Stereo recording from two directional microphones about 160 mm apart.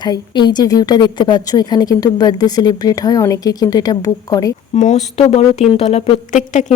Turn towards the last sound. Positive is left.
turn(degrees=50)  # may be behind; listen again after turning